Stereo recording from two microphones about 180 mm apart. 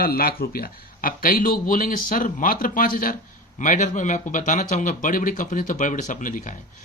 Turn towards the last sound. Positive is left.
turn(degrees=45)  # may be behind; listen again after turning